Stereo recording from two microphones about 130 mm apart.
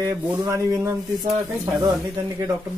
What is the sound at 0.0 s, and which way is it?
Speech, 25° right (ahead or behind).